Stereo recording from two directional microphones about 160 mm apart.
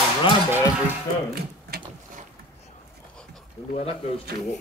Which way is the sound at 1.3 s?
70° right (ahead or behind).